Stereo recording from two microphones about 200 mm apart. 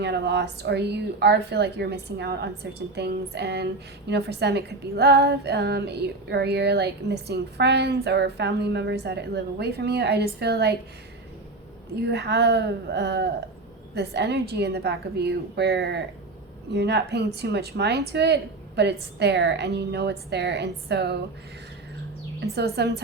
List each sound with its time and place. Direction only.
0.0 s speech: 60° right (ahead or behind)
12.0 s speech: 55° right (ahead or behind)
22.5 s speech: 55° right (ahead or behind)